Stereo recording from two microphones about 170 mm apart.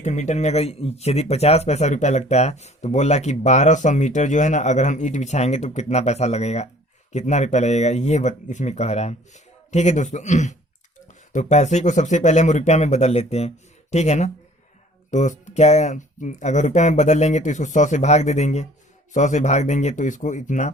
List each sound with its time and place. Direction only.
0.0 s speech: 45° left (ahead or behind)